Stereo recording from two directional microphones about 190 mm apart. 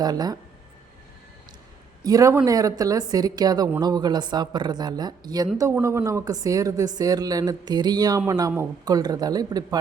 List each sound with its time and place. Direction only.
0.0 s speech: 20° right (ahead or behind)
2.0 s speech: 15° right (ahead or behind)